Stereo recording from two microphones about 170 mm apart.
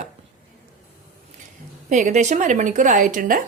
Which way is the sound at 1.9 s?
45° right (ahead or behind).